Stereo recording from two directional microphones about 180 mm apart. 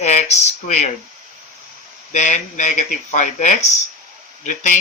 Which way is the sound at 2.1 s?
40° left (ahead or behind).